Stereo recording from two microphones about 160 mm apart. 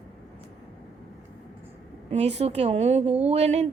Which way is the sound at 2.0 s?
45° right (ahead or behind).